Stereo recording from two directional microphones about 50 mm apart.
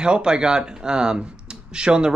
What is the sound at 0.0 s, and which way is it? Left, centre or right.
Speech, centre.